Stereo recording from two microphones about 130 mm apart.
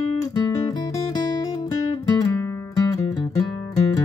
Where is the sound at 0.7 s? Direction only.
30° left (ahead or behind).